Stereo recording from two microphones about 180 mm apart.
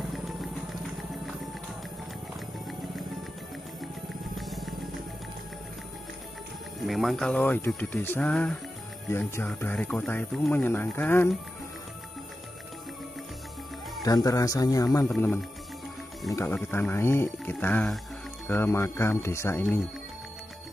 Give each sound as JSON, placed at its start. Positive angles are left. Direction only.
{"t": 4.4, "sound": "music", "side_deg": 0}
{"t": 6.9, "sound": "speech", "side_deg": 0}
{"t": 14.0, "sound": "speech", "side_deg": 20}
{"t": 15.1, "sound": "speech", "side_deg": 10}